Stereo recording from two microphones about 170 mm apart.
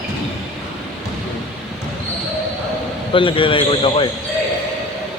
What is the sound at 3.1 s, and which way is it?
Speech, 30° left (ahead or behind).